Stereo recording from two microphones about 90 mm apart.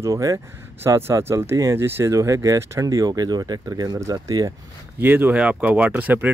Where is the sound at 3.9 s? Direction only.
40° right (ahead or behind).